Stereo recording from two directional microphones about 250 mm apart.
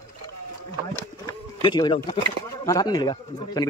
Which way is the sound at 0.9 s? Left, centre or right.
Centre.